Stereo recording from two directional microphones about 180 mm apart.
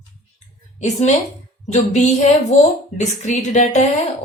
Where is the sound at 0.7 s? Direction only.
40° left (ahead or behind).